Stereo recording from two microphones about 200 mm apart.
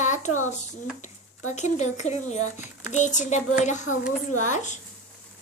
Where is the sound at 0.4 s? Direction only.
35° left (ahead or behind).